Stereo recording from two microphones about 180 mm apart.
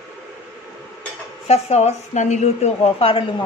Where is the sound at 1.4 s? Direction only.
35° left (ahead or behind).